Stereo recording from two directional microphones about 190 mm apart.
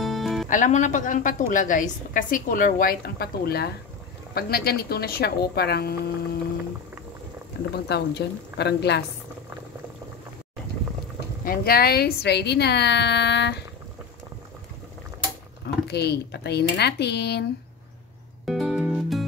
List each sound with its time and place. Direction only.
0.0 s music: centre (ahead or behind)
0.5 s a woman's voice: 40° left (ahead or behind); by 5.9 s 55° left (ahead or behind)
7.7 s speech: 60° left (ahead or behind)
11.4 s speech: 50° left (ahead or behind)
15.6 s speech: 60° left (ahead or behind)
18.4 s music: centre (ahead or behind)